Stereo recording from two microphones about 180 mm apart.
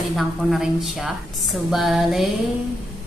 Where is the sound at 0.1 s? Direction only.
Centre (ahead or behind).